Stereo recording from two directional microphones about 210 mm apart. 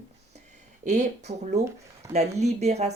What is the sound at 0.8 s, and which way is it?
Speech, 35° right (ahead or behind).